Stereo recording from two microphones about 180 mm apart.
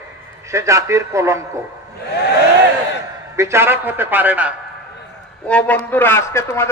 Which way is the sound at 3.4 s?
15° right (ahead or behind).